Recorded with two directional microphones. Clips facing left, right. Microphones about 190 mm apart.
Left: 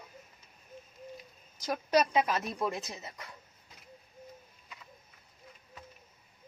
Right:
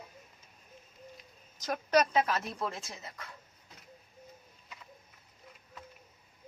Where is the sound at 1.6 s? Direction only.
10° left (ahead or behind).